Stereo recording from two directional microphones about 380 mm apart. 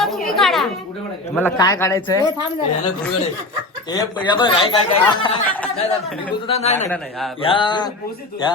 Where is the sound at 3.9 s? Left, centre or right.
Centre.